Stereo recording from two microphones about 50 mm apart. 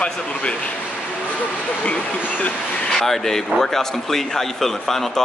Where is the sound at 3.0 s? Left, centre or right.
Centre.